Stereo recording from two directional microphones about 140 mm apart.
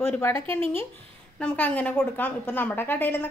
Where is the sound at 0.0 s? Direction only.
15° left (ahead or behind).